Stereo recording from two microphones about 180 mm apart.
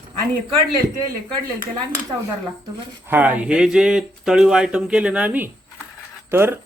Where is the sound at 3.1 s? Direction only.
10° right (ahead or behind).